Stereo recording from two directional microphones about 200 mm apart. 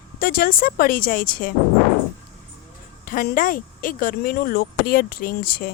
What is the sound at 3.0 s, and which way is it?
Speech, 45° left (ahead or behind).